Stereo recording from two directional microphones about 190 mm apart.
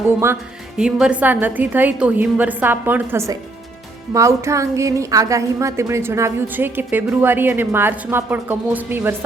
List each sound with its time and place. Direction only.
0.8 s a woman's voice: 5° right (ahead or behind)